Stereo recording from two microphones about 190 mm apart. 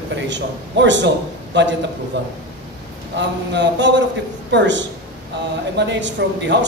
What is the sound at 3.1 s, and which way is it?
A man's voice, 65° right (ahead or behind).